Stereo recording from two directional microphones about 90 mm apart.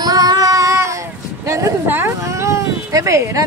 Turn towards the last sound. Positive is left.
turn(degrees=-35)  # may be behind; listen again after turning